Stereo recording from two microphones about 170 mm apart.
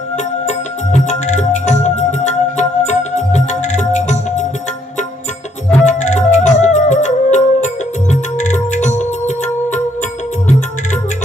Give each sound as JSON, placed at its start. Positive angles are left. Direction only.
{"t": 0.9, "sound": "music", "side_deg": 45}
{"t": 5.8, "sound": "music", "side_deg": 45}